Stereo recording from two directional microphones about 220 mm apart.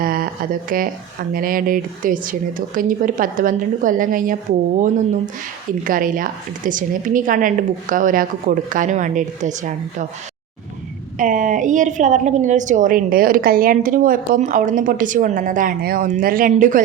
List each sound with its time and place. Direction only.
0.0 s a sound: 40° right (ahead or behind)
0.7 s a woman's voice: 40° right (ahead or behind)
5.8 s a woman's voice: 40° right (ahead or behind)
11.2 s a woman's voice: 35° right (ahead or behind)